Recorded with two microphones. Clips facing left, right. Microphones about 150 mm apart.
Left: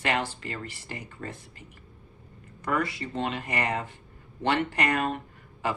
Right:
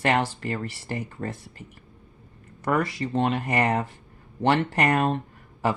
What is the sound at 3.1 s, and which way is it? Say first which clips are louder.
Speech: right 8 dB; 45° right (ahead or behind).